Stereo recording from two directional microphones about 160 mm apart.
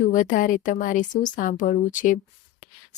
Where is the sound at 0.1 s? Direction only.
55° left (ahead or behind).